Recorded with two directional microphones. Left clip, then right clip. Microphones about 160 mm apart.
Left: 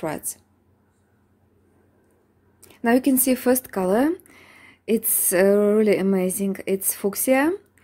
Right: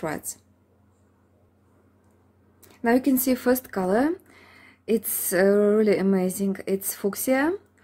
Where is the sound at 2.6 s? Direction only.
20° left (ahead or behind).